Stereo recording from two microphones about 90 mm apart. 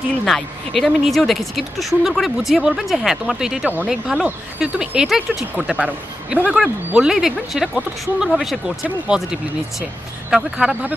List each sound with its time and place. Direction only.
0.2 s speech: 5° left (ahead or behind)
5.6 s speech: 15° right (ahead or behind)